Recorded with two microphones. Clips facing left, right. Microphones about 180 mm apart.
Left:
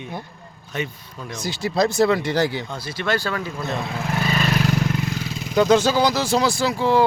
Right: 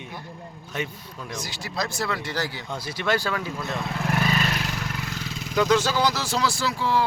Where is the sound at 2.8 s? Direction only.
15° right (ahead or behind).